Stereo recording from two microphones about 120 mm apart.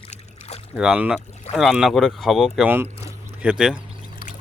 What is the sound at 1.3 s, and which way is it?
Boat, 70° left (ahead or behind).